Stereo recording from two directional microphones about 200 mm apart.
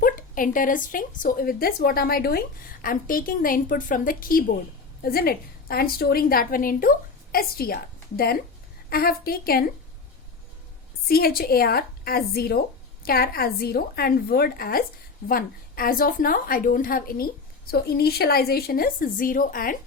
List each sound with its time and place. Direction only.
0.0 s a woman's voice: 45° left (ahead or behind)
11.1 s a woman's voice: 50° left (ahead or behind)